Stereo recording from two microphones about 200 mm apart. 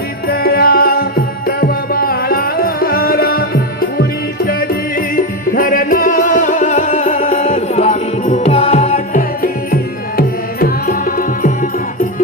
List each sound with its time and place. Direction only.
0.3 s music: 50° left (ahead or behind); by 9.2 s 35° left (ahead or behind)
10.2 s music: 45° left (ahead or behind)